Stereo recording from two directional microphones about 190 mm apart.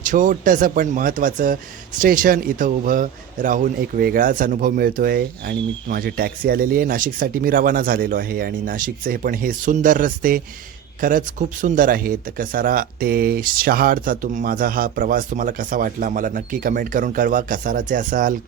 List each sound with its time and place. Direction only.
0.0 s speech: 45° right (ahead or behind)